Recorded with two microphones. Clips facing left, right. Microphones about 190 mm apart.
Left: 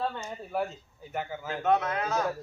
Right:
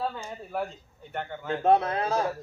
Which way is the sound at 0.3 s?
Centre (ahead or behind).